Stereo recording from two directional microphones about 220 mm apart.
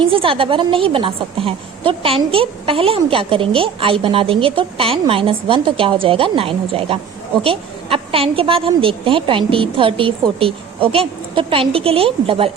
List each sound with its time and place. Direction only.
0.0 s a woman's voice: 25° right (ahead or behind)